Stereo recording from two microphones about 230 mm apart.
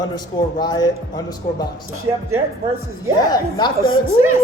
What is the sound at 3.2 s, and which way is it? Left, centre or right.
Speech, centre.